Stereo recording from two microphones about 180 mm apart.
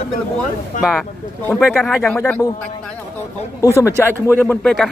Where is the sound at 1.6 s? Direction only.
Centre (ahead or behind).